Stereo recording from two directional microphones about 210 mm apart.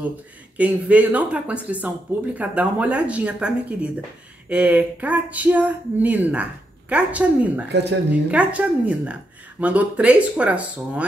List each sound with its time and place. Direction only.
0.6 s speech: 5° right (ahead or behind)
7.6 s speech: 55° right (ahead or behind)
8.1 s speech: 5° right (ahead or behind)